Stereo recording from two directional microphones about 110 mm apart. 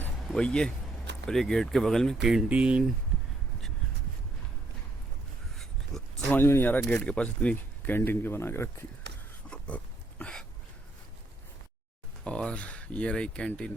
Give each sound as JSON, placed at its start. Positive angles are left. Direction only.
{"t": 0.3, "sound": "speech", "side_deg": 5}
{"t": 5.9, "sound": "a sound", "side_deg": 0}
{"t": 6.3, "sound": "speech", "side_deg": 20}
{"t": 9.5, "sound": "pig", "side_deg": 10}
{"t": 12.2, "sound": "speech", "side_deg": 10}